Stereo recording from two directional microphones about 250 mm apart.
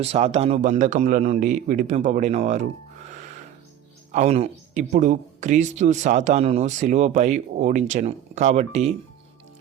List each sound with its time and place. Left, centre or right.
0.0 s a man's voice: right
3.1 s music: right
4.1 s a man's voice: right